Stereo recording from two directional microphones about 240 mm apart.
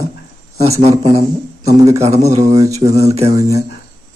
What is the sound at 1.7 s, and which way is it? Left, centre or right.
Speech, centre.